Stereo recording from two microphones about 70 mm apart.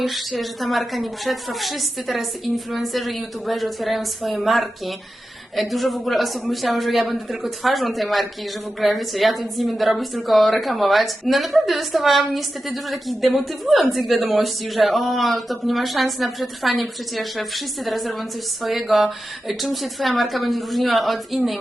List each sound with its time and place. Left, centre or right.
0.0 s a woman's voice: centre